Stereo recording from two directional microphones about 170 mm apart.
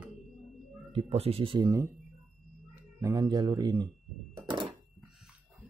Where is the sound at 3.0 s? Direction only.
20° right (ahead or behind).